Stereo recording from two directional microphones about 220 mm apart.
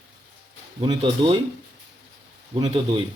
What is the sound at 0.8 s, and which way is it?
Speech, 20° right (ahead or behind).